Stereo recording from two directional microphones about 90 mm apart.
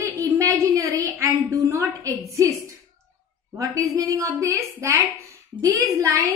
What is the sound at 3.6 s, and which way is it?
A woman's voice, 35° right (ahead or behind).